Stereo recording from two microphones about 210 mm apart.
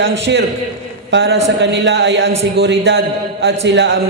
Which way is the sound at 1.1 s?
55° right (ahead or behind).